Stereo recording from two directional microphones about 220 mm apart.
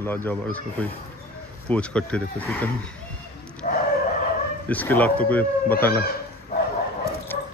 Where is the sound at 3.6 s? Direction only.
35° left (ahead or behind).